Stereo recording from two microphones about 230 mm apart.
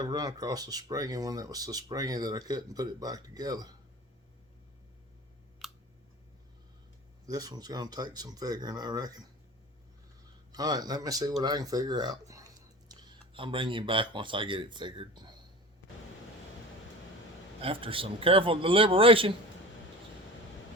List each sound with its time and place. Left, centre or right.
0.0 s speech: centre
5.6 s clicking: centre
7.3 s speech: centre
10.5 s speech: centre
17.6 s a man's voice: right